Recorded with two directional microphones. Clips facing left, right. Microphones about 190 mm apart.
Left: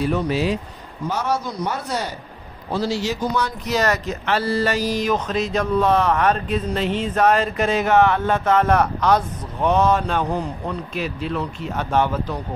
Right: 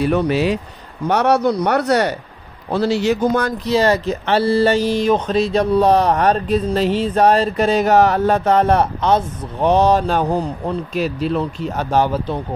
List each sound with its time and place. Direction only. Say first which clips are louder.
0.0 s speech: right 4 dB; 65° right (ahead or behind); by 3.5 s 50° right (ahead or behind)
3.6 s speech: right 6 dB; 30° right (ahead or behind)